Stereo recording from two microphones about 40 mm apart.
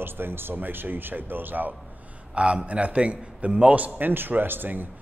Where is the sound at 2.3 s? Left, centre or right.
Right.